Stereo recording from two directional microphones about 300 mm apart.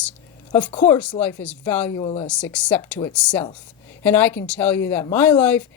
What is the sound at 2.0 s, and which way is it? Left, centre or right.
Speech, centre.